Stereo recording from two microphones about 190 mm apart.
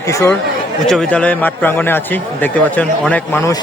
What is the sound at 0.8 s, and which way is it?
A man's voice, 5° left (ahead or behind).